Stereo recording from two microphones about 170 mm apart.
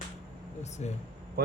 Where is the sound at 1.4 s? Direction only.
60° right (ahead or behind).